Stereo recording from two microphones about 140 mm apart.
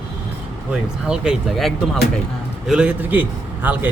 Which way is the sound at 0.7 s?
5° right (ahead or behind).